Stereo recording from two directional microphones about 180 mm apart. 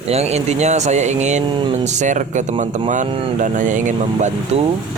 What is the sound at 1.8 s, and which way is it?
Speech, 40° right (ahead or behind).